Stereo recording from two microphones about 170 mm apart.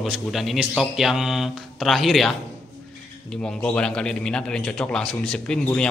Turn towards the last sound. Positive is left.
turn(degrees=5)  # may be behind; listen again after turning